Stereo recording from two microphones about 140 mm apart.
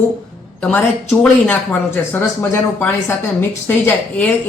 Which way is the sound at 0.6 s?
5° left (ahead or behind).